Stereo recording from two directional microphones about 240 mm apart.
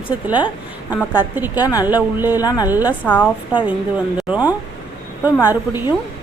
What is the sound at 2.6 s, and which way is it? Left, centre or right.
Speech, centre.